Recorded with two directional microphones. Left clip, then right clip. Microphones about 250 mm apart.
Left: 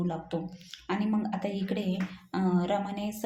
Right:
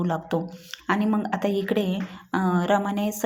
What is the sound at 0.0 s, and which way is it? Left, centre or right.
Speech, right.